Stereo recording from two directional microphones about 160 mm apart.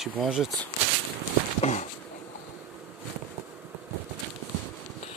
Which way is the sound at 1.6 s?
45° left (ahead or behind).